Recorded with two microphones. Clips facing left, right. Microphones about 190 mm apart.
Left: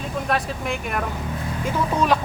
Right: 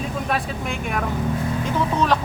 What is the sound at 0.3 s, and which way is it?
Speech, centre (ahead or behind).